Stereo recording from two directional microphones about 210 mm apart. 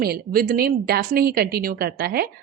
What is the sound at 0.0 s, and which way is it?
A woman's voice, 45° right (ahead or behind).